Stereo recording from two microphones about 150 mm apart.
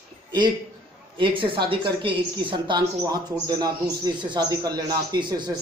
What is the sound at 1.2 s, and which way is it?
A man's voice, 35° right (ahead or behind).